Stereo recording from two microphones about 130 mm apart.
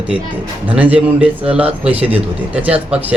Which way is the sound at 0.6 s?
10° right (ahead or behind).